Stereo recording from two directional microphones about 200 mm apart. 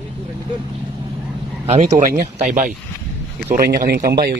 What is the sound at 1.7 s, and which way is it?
A man's voice, 35° right (ahead or behind).